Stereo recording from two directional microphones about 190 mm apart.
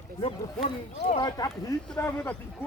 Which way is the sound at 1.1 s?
20° left (ahead or behind).